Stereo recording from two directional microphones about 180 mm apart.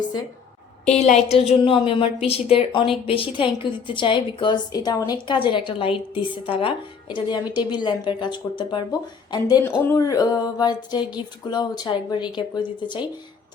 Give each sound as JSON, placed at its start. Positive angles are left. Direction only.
{"t": 1.3, "sound": "a woman's voice", "side_deg": 35}